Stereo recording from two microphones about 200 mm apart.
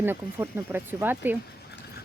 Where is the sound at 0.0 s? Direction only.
10° right (ahead or behind).